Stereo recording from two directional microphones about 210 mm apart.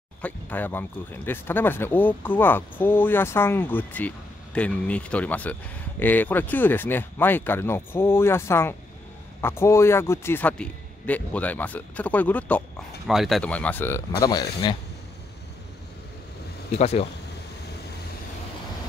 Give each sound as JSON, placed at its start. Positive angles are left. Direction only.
{"t": 0.2, "sound": "a man's voice", "side_deg": 10}
{"t": 16.7, "sound": "speech", "side_deg": 30}